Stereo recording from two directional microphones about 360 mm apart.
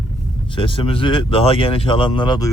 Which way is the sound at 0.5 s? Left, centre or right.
Centre.